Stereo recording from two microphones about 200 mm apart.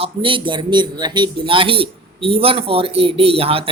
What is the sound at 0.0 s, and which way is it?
Speech, 25° right (ahead or behind).